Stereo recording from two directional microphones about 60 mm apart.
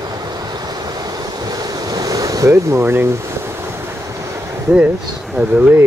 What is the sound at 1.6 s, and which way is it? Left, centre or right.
Waves, right.